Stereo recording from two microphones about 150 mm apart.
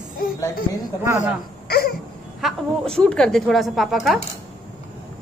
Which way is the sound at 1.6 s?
90° left.